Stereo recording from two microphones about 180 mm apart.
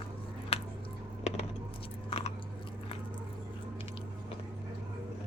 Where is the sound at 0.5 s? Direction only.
35° left (ahead or behind).